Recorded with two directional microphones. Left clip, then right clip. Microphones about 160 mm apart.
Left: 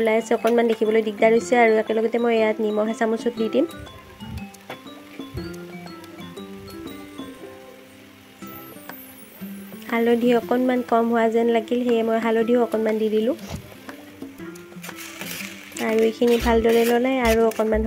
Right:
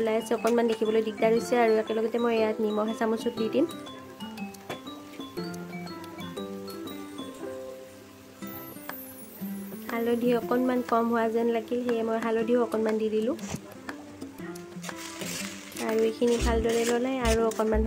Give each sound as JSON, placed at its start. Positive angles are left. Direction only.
{"t": 0.0, "sound": "speech", "side_deg": 15}
{"t": 5.4, "sound": "music", "side_deg": 0}
{"t": 9.8, "sound": "speech", "side_deg": 25}
{"t": 12.6, "sound": "speech", "side_deg": 5}
{"t": 13.0, "sound": "speech", "side_deg": 15}
{"t": 16.0, "sound": "speech", "side_deg": 25}